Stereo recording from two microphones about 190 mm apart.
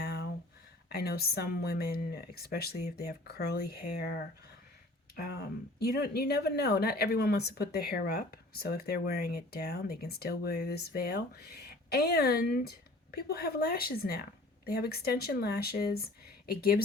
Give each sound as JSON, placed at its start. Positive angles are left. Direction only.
{"t": 0.0, "sound": "a sound", "side_deg": 55}
{"t": 0.9, "sound": "speech", "side_deg": 55}
{"t": 5.1, "sound": "speech", "side_deg": 55}